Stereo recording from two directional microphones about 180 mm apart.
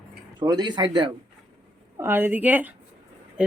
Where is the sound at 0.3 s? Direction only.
25° right (ahead or behind).